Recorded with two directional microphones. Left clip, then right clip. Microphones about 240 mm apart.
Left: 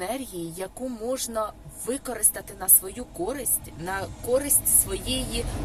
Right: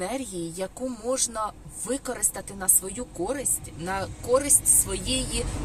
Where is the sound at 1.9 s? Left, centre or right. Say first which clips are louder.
Right 3 dB; centre.